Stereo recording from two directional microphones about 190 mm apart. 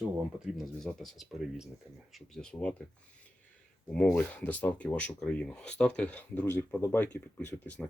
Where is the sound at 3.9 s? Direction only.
5° left (ahead or behind).